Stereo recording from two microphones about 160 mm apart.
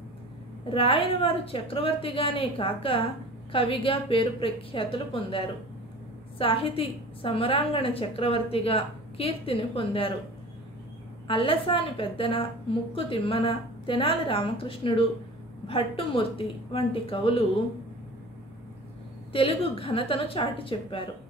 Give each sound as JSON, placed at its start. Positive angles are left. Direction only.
{"t": 0.7, "sound": "a woman's voice", "side_deg": 35}
{"t": 11.2, "sound": "a woman's voice", "side_deg": 35}
{"t": 19.3, "sound": "a woman's voice", "side_deg": 35}